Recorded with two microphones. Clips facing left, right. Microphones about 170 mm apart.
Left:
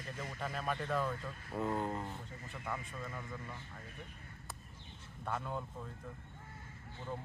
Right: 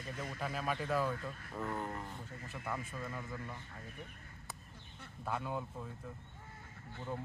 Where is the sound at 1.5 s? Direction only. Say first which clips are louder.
Left 5 dB; 20° left (ahead or behind).